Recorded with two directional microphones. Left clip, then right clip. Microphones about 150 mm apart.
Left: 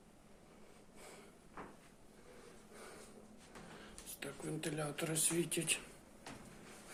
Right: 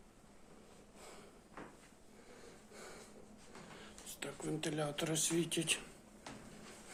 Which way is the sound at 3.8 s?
30° right (ahead or behind).